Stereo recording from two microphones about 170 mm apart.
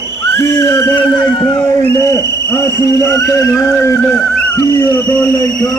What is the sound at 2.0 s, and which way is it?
A man's voice, 20° left (ahead or behind).